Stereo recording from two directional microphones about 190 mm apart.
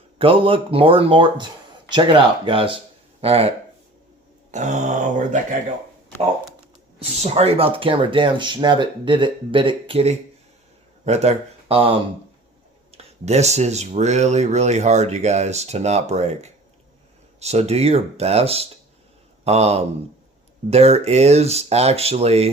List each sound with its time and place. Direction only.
0.2 s speech: 30° right (ahead or behind)
4.5 s speech: 40° right (ahead or behind)
7.0 s speech: 30° right (ahead or behind)